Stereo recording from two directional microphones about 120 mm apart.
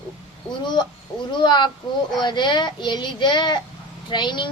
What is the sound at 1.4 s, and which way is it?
A woman's voice, 40° left (ahead or behind).